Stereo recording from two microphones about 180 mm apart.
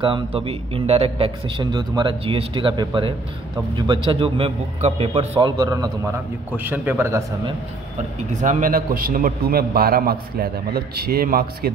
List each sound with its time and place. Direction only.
0.0 s a man's voice: 30° right (ahead or behind)
5.4 s a man's voice: 20° right (ahead or behind)
8.4 s a man's voice: 45° right (ahead or behind)